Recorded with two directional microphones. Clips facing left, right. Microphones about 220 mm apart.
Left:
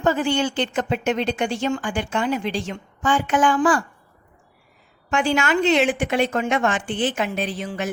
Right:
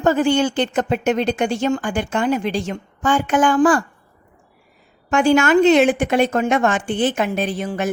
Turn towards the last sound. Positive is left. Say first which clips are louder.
# right 4 dB
turn(degrees=-50)  # may be behind; listen again after turning